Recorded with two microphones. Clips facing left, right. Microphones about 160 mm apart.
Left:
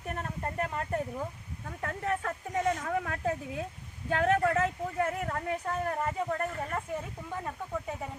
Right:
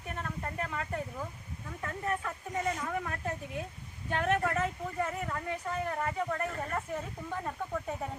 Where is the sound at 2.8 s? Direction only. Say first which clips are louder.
Left 3 dB; 85° left.